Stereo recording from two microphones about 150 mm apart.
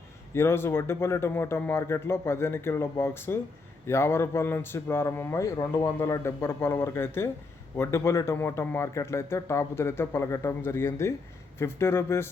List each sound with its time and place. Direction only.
0.3 s speech: 15° left (ahead or behind)